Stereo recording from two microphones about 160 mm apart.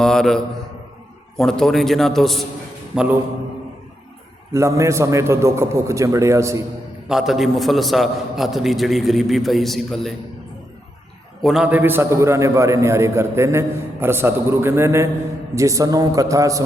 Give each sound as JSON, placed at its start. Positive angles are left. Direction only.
{"t": 0.0, "sound": "a man's voice", "side_deg": 5}
{"t": 4.5, "sound": "a man's voice", "side_deg": -20}
{"t": 7.1, "sound": "a man's voice", "side_deg": 0}
{"t": 11.4, "sound": "a man's voice", "side_deg": -5}